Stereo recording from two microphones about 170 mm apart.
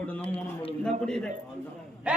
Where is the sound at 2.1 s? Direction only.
5° right (ahead or behind).